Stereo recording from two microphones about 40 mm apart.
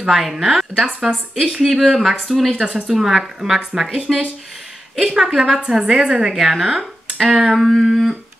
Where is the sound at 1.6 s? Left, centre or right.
Centre.